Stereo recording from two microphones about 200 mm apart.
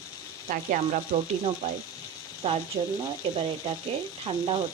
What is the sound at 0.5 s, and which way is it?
Speech, 40° right (ahead or behind).